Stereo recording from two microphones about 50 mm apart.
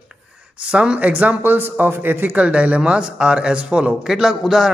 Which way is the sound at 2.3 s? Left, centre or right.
Right.